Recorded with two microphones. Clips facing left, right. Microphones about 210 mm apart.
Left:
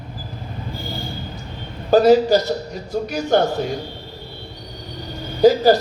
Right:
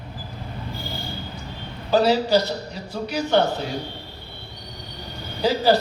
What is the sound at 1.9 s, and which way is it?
A man's voice, 50° left (ahead or behind).